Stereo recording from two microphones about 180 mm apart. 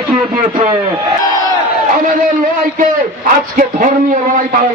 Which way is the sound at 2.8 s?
50° right (ahead or behind).